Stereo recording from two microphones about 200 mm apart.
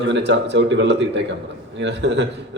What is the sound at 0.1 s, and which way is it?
A man's voice, 60° right (ahead or behind).